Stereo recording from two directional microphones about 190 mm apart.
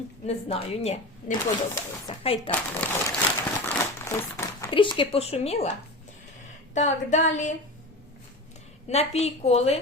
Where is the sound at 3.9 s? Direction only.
15° left (ahead or behind).